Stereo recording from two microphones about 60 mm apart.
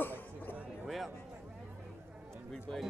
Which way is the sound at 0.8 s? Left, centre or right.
Centre.